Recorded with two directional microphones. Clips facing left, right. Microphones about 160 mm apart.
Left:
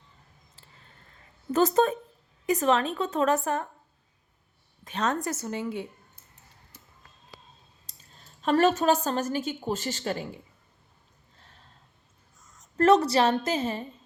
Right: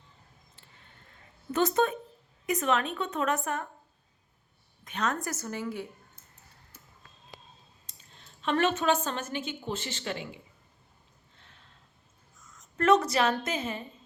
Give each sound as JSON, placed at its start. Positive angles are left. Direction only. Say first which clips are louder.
{"t": 1.5, "sound": "a woman's voice", "louder": "left 4 dB", "side_deg": 40}
{"t": 4.9, "sound": "a woman's voice", "louder": "left 3 dB", "side_deg": 30}
{"t": 7.9, "sound": "speech", "louder": "left 3 dB", "side_deg": 40}
{"t": 11.3, "sound": "snort", "louder": "left 3 dB", "side_deg": 35}
{"t": 12.5, "sound": "a woman's voice", "louder": "left 3 dB", "side_deg": 35}